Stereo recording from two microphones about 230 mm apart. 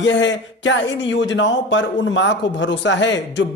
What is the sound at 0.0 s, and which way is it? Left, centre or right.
A man's voice, left.